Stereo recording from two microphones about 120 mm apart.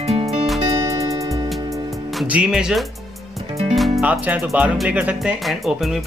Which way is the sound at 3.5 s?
60° right (ahead or behind).